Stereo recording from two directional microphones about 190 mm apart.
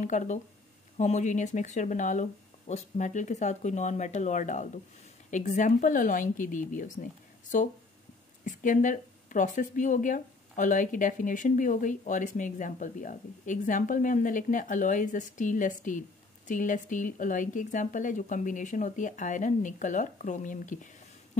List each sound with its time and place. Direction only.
0.0 s speech: 40° left (ahead or behind)